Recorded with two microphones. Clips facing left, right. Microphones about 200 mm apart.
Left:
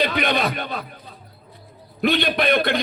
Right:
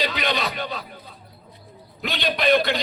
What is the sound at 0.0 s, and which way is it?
Speech, 55° left (ahead or behind).